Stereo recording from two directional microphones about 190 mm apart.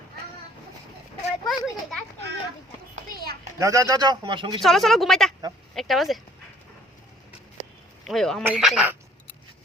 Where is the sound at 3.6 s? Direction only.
15° right (ahead or behind).